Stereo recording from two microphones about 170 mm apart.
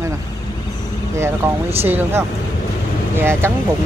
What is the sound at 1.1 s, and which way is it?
Speech, 15° right (ahead or behind).